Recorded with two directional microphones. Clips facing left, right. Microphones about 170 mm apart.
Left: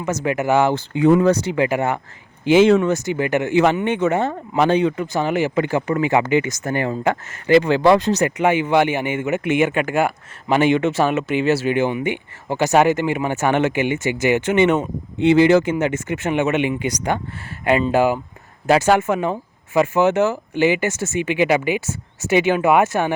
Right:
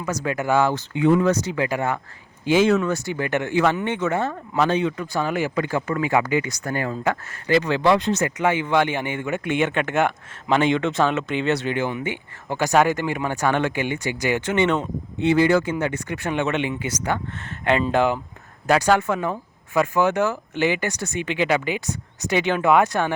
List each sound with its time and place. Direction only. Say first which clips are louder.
0.0 s speech: left 4 dB; 25° left (ahead or behind)
0.9 s speech: left 4 dB; 40° left (ahead or behind)
2.6 s speech: left 5 dB; 25° left (ahead or behind)
5.1 s speech: left 2 dB; 20° left (ahead or behind); by 8.3 s 40° left (ahead or behind)
8.4 s speech: left 4 dB; 15° left (ahead or behind)
15.2 s speech: left 5 dB; 25° left (ahead or behind); by 18.2 s 5° left (ahead or behind)
18.9 s speech: left 4 dB; 20° left (ahead or behind)